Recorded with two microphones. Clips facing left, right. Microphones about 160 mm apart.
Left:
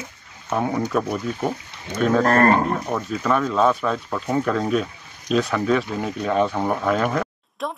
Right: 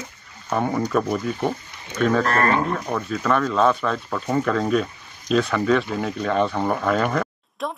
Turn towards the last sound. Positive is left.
turn(degrees=0)  # may be behind; listen again after turning